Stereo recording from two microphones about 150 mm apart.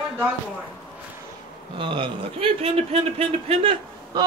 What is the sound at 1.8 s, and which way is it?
A man's voice, 35° right (ahead or behind).